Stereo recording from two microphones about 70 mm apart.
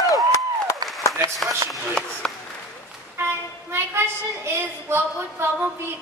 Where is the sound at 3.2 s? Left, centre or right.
Right.